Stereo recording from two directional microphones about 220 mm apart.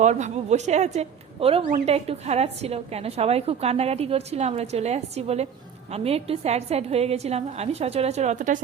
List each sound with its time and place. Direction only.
0.0 s a woman's voice: 30° right (ahead or behind)